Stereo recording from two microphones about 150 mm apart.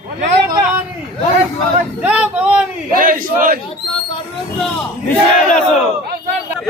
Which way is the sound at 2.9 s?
65° right (ahead or behind).